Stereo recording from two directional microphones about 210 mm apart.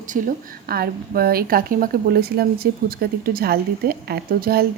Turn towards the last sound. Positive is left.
turn(degrees=-45)  # may be behind; listen again after turning